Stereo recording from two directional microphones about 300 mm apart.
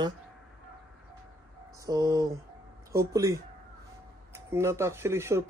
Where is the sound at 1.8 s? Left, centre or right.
Centre.